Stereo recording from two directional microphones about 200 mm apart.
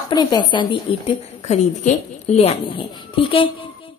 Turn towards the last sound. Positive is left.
turn(degrees=25)  # may be behind; listen again after turning